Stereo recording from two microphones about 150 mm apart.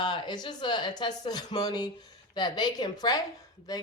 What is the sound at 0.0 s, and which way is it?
Speech, 30° left (ahead or behind).